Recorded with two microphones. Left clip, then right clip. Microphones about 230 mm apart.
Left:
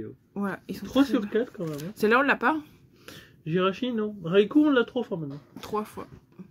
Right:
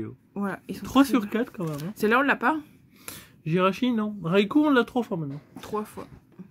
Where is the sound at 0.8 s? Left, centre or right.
Right.